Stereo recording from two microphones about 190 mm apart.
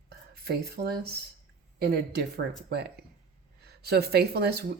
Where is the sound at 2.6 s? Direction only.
60° right (ahead or behind).